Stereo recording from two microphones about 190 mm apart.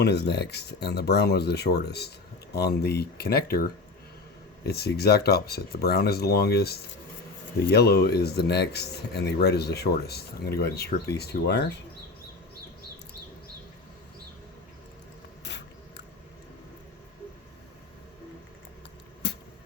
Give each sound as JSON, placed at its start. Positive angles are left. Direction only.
{"t": 0.0, "sound": "speech", "side_deg": 60}